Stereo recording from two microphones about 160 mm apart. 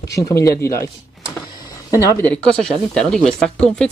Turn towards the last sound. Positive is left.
turn(degrees=5)  # may be behind; listen again after turning